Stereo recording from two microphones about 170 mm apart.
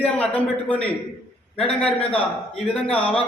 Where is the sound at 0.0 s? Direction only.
10° left (ahead or behind).